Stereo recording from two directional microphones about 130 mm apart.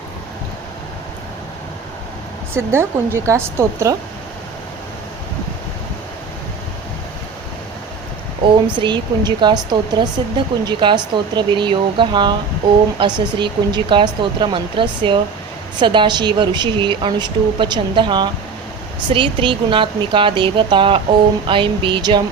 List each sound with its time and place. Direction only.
2.5 s a woman's voice: 20° right (ahead or behind)
8.6 s a woman's voice: 35° right (ahead or behind)